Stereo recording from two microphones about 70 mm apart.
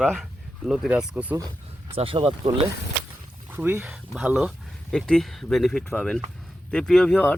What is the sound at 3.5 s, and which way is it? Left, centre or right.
Speech, right.